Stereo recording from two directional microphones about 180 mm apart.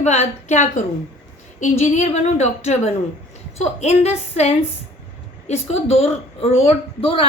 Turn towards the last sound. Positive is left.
turn(degrees=30)  # may be behind; listen again after turning